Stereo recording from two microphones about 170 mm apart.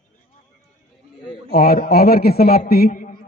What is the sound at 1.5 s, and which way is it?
A man's voice, 65° left (ahead or behind).